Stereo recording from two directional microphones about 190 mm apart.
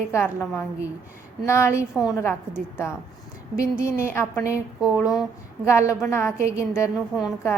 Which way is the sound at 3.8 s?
15° left (ahead or behind).